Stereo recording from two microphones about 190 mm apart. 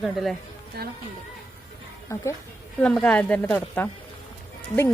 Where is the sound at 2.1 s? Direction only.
15° left (ahead or behind).